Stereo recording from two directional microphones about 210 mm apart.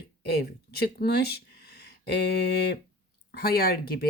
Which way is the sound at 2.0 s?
50° left (ahead or behind).